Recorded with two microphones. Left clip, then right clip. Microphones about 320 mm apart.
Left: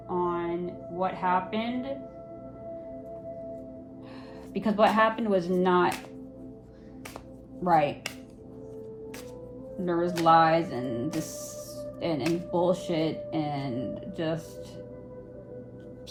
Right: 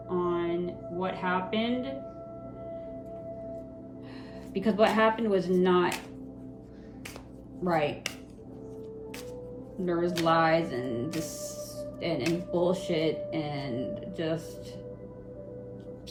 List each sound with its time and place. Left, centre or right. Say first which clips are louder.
0.2 s a sound: even; centre
4.5 s speech: left 2 dB; centre
7.6 s speech: left 4 dB; centre
9.8 s speech: left 3 dB; centre